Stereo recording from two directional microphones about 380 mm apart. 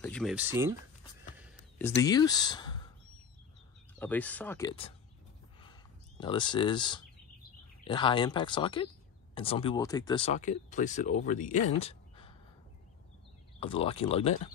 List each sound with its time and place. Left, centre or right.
0.0 s speech: centre
1.8 s speech: centre
4.0 s speech: centre
5.6 s a sound: centre
7.8 s speech: centre
13.6 s speech: centre